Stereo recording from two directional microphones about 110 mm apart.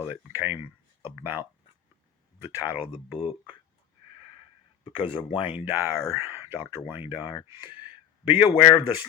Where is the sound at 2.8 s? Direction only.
70° left (ahead or behind).